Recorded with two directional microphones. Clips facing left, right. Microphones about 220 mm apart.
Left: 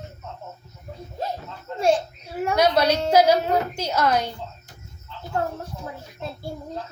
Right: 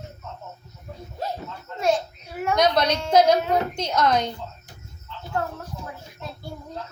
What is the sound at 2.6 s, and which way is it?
A woman's voice, 10° left (ahead or behind).